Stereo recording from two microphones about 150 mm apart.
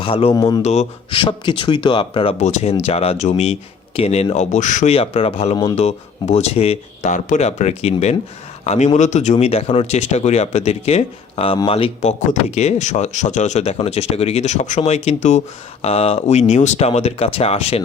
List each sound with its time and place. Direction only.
0.0 s speech: 35° left (ahead or behind)
0.3 s speech: 25° left (ahead or behind)
0.6 s speech: 45° left (ahead or behind)
2.4 s speech: 50° left (ahead or behind)
4.9 s speech: 40° left (ahead or behind)
12.3 s speech: 50° left (ahead or behind)